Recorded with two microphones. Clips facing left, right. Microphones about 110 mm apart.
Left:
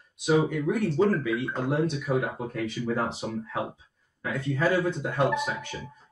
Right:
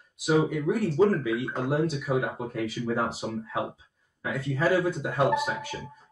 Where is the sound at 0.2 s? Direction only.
5° right (ahead or behind).